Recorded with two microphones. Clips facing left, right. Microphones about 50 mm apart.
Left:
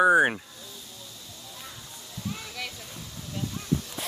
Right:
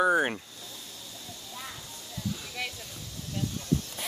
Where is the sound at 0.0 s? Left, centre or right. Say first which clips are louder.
Left 5 dB; centre.